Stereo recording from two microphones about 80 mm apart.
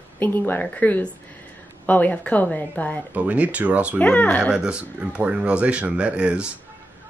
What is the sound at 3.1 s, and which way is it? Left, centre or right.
Speech, centre.